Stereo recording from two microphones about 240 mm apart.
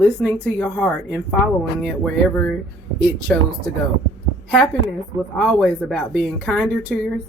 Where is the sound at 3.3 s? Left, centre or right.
Centre.